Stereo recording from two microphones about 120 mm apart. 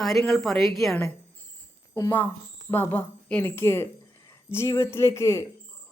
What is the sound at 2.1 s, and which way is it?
A woman's voice, 15° left (ahead or behind).